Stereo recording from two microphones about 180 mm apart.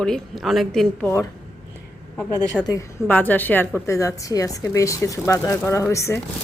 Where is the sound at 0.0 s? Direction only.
Centre (ahead or behind).